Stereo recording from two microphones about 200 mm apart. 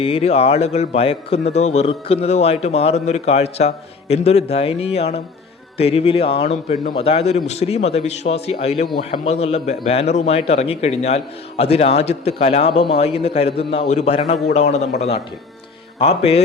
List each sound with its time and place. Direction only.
0.0 s a man's voice: 30° left (ahead or behind)
16.0 s a man's voice: 30° left (ahead or behind)